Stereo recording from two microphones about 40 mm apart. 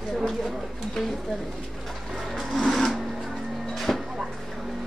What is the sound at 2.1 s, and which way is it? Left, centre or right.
Wood, centre.